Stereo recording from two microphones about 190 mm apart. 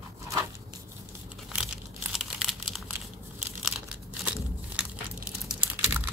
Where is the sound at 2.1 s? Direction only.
Centre (ahead or behind).